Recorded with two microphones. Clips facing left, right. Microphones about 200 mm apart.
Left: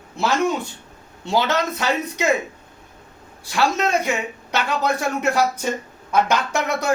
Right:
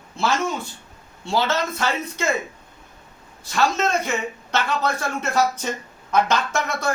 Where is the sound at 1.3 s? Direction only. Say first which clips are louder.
Left 2 dB; 15° left (ahead or behind).